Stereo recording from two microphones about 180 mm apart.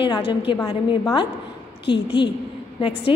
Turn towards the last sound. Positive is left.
turn(degrees=30)  # may be behind; listen again after turning